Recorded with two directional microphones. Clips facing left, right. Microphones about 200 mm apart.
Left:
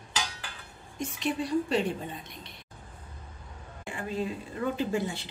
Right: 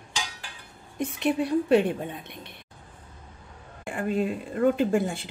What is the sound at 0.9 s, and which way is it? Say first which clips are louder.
A woman's voice: right 6 dB; 60° right (ahead or behind).